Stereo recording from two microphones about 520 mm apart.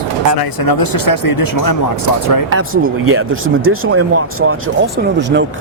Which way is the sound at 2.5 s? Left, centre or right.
Right.